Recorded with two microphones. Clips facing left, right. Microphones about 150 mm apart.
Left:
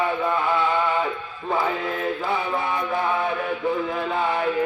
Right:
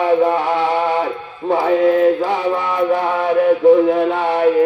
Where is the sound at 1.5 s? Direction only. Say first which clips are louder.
Right 10 dB; 70° right (ahead or behind).